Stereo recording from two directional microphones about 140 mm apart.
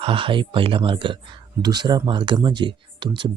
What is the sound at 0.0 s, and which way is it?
Speech, 40° right (ahead or behind).